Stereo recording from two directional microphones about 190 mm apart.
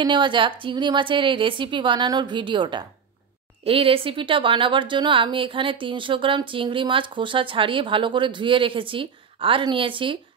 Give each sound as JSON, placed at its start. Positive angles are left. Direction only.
{"t": 0.0, "sound": "a woman's voice", "side_deg": -25}